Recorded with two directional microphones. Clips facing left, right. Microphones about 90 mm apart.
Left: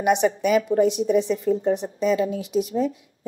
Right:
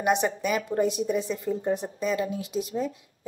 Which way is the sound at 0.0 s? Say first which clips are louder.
Left 5 dB; 20° left (ahead or behind).